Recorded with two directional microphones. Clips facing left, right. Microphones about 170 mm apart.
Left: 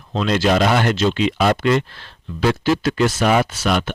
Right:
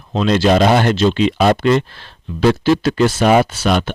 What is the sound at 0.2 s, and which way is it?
Speech, 30° right (ahead or behind).